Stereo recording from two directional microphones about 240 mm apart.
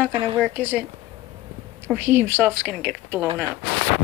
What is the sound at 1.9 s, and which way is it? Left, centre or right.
A woman's voice, centre.